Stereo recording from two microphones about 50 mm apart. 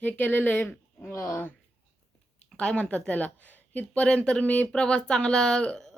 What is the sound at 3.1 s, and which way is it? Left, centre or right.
Speech, left.